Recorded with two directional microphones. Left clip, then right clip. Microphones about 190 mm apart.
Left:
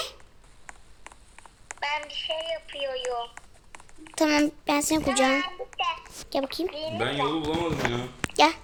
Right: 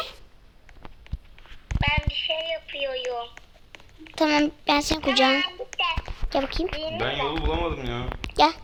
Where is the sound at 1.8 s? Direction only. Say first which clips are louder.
Right 4 dB; 35° right (ahead or behind).